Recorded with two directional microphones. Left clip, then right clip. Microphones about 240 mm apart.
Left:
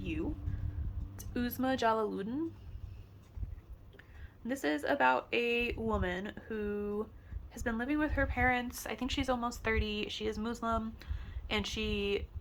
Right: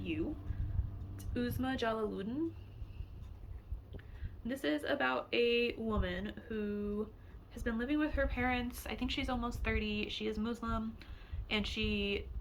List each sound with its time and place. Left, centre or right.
0.0 s a sound: centre
1.1 s a woman's voice: left
4.4 s a woman's voice: centre